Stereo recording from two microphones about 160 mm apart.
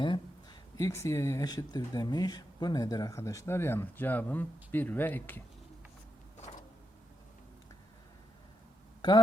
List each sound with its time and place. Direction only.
0.0 s speech: 30° left (ahead or behind); by 5.4 s 10° left (ahead or behind)